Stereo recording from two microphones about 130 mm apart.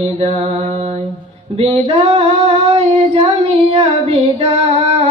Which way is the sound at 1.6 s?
45° right (ahead or behind).